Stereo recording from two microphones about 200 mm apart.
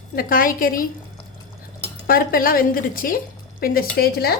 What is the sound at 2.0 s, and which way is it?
Speech, 45° left (ahead or behind).